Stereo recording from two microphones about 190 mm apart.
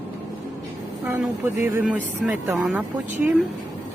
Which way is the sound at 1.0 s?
15° right (ahead or behind).